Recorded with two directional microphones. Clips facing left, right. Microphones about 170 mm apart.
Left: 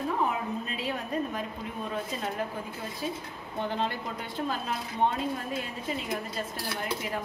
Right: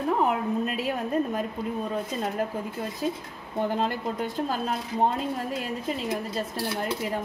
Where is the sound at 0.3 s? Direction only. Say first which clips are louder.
Right 6 dB; 50° right (ahead or behind).